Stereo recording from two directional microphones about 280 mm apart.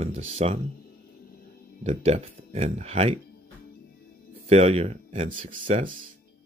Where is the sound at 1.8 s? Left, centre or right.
Right.